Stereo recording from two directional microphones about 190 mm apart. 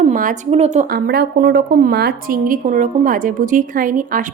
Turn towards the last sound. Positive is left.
turn(degrees=-45)  # may be behind; listen again after turning